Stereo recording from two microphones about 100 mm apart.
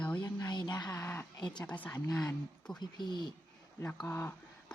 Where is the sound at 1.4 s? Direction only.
45° left (ahead or behind).